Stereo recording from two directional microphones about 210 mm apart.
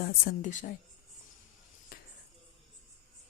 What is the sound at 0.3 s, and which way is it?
Speech, 40° left (ahead or behind).